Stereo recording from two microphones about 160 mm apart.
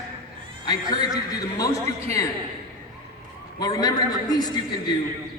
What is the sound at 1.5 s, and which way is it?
Speech, 20° left (ahead or behind).